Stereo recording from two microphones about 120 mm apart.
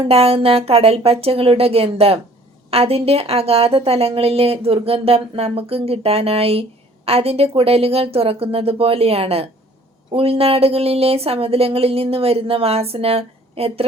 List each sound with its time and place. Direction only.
0.0 s a woman's voice: 55° right (ahead or behind)